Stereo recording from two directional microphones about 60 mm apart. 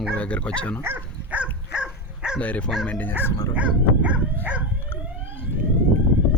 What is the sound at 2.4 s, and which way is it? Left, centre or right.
Speech, left.